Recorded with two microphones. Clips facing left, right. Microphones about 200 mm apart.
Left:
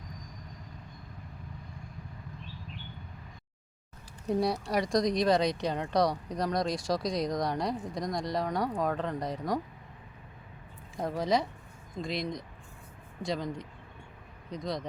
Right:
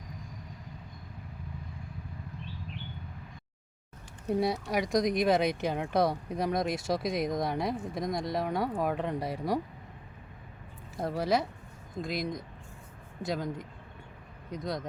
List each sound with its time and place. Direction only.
4.3 s speech: centre (ahead or behind)
6.7 s speech: 25° right (ahead or behind)
7.0 s speech: 5° right (ahead or behind)
10.9 s speech: 5° right (ahead or behind)